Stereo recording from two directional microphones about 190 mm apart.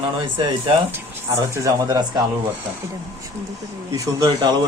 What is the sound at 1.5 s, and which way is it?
Speech, 15° right (ahead or behind).